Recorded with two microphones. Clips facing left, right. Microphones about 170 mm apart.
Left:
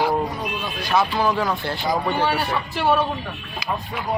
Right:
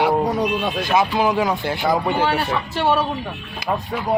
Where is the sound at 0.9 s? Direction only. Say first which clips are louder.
Right 1 dB; 15° right (ahead or behind).